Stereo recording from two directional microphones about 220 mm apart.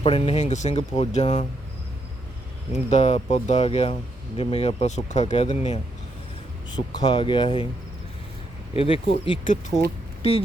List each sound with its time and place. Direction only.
0.0 s speech: 25° left (ahead or behind)
2.9 s speech: 30° left (ahead or behind)
8.7 s speech: 25° left (ahead or behind)
9.4 s speech: 35° left (ahead or behind)